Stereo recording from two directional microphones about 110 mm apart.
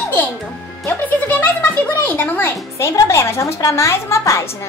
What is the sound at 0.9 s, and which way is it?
Speech, 15° left (ahead or behind).